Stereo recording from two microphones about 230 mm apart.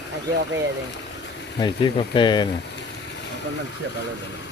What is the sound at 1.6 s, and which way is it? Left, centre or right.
Speech, left.